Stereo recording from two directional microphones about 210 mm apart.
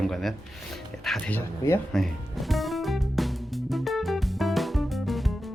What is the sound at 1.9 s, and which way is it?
Music, centre (ahead or behind).